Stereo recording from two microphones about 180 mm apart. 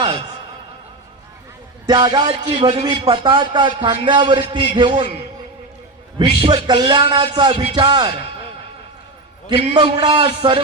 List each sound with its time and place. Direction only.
1.9 s a man's voice: 25° right (ahead or behind)
6.4 s a man's voice: 25° right (ahead or behind)
9.5 s a man's voice: 25° right (ahead or behind)